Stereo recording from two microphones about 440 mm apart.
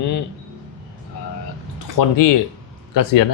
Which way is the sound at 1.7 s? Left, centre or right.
Left.